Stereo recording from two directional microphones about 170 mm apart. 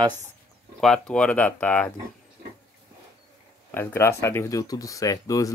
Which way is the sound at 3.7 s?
15° left (ahead or behind).